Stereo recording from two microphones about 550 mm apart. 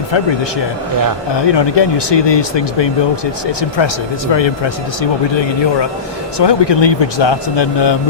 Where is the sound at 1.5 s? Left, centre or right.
Left.